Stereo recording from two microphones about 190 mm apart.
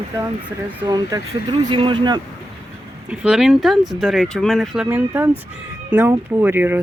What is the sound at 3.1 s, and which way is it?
Speech, 5° right (ahead or behind).